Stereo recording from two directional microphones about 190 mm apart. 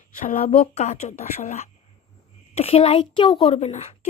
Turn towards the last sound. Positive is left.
turn(degrees=35)  # may be behind; listen again after turning